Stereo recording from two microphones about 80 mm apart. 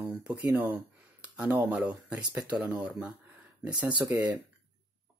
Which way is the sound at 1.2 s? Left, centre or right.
Centre.